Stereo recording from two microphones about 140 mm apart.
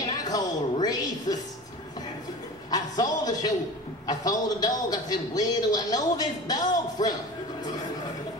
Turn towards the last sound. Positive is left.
turn(degrees=30)  # may be behind; listen again after turning